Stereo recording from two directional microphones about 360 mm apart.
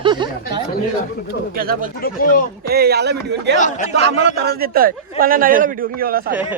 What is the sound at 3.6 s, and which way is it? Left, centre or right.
Speech, left.